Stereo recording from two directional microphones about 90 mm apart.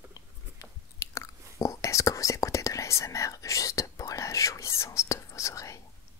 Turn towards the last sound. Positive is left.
turn(degrees=35)  # may be behind; listen again after turning